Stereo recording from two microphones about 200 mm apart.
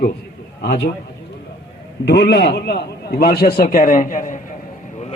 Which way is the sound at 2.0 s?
55° left (ahead or behind).